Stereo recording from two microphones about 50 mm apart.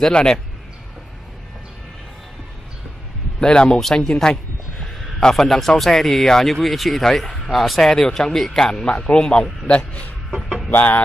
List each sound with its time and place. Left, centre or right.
0.1 s speech: centre
3.3 s a man's voice: centre
5.3 s a man's voice: centre; by 10.4 s left
10.7 s music: left